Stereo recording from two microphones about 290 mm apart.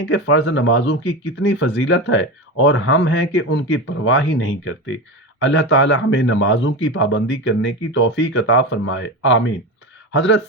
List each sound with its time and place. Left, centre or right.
0.0 s a man's voice: left